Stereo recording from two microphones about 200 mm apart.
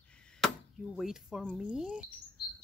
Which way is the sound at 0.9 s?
Centre (ahead or behind).